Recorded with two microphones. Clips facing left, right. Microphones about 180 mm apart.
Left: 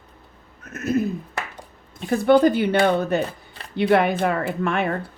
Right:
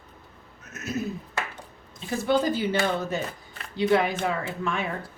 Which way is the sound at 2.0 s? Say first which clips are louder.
Left 8 dB; 60° left (ahead or behind).